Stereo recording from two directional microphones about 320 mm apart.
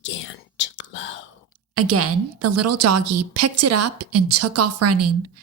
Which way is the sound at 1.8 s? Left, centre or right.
Right.